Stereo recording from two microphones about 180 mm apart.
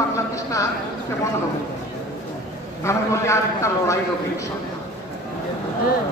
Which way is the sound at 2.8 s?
15° left (ahead or behind).